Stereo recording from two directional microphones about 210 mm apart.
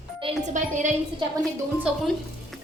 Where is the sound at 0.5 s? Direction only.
35° right (ahead or behind).